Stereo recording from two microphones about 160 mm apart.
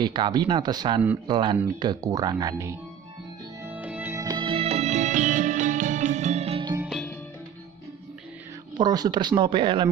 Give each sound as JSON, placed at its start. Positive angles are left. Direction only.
{"t": 0.0, "sound": "speech", "side_deg": -30}
{"t": 3.6, "sound": "music", "side_deg": -10}
{"t": 8.7, "sound": "speech", "side_deg": -25}